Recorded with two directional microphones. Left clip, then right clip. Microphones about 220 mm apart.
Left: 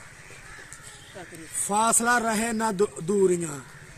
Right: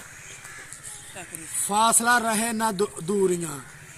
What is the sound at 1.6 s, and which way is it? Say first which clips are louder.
A man's voice: right 2 dB; 5° left (ahead or behind).